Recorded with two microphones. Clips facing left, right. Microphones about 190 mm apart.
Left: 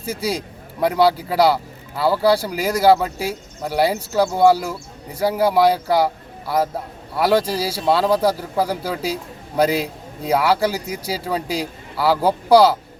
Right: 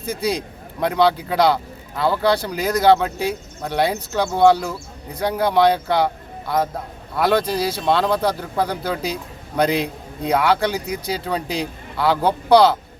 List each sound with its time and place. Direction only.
0.0 s a man's voice: 10° left (ahead or behind)
7.2 s a man's voice: 10° left (ahead or behind)